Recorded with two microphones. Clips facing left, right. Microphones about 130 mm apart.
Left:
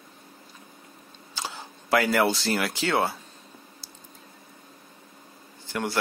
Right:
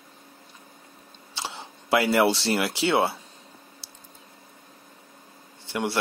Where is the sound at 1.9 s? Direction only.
30° right (ahead or behind).